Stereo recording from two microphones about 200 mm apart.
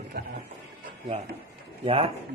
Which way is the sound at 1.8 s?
25° right (ahead or behind).